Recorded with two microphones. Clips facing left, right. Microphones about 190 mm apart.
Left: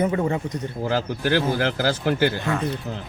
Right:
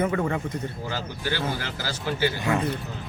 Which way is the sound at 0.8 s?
50° left (ahead or behind).